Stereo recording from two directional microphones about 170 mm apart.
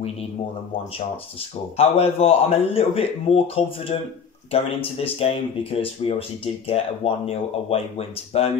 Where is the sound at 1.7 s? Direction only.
35° left (ahead or behind).